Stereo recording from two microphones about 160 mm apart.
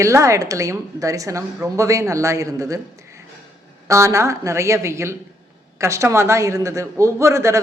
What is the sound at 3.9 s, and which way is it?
A woman's voice, 20° right (ahead or behind).